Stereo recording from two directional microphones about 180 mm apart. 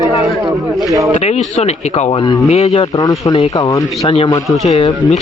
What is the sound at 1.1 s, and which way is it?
Speech, 35° left (ahead or behind).